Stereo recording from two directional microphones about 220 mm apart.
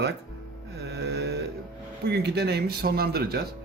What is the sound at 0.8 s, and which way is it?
Mantra, 50° right (ahead or behind).